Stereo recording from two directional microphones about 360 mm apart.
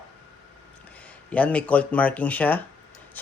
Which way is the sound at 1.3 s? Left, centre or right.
Centre.